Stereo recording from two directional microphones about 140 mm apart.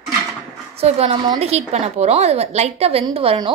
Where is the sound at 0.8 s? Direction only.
45° right (ahead or behind).